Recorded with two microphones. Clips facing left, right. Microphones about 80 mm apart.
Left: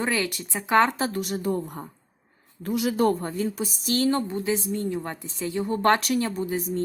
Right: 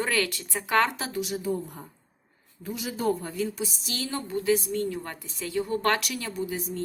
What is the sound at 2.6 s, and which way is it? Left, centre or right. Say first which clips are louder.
Speech: left 6 dB; left.